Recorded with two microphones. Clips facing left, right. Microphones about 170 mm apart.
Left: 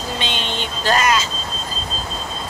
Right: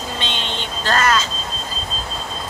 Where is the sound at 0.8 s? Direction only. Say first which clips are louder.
Left 1 dB; 15° left (ahead or behind).